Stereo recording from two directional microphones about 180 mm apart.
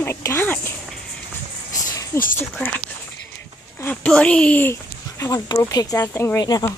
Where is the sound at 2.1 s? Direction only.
15° left (ahead or behind).